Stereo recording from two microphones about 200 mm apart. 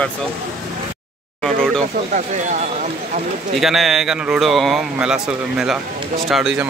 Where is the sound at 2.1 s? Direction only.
40° right (ahead or behind).